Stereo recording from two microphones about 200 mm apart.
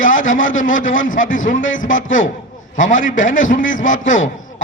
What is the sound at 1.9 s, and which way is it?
Speech, 70° left (ahead or behind).